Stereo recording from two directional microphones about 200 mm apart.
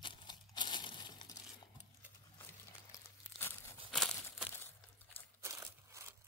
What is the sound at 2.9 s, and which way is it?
Crumpling, 10° left (ahead or behind).